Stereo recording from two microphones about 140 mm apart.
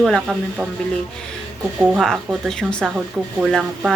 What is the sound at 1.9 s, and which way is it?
Speech, centre (ahead or behind).